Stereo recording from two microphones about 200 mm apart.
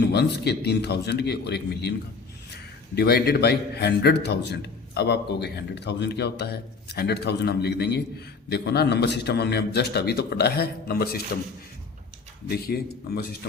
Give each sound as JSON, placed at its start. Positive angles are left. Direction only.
{"t": 0.0, "sound": "a man's voice", "side_deg": 55}
{"t": 2.9, "sound": "a man's voice", "side_deg": 50}
{"t": 12.5, "sound": "speech", "side_deg": 50}